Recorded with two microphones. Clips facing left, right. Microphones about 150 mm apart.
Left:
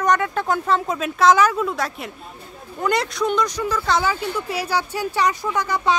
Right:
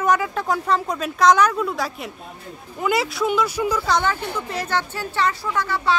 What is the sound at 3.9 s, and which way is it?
Speech, 5° left (ahead or behind).